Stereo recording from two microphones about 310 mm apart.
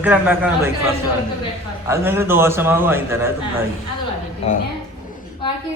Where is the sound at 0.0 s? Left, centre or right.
Centre.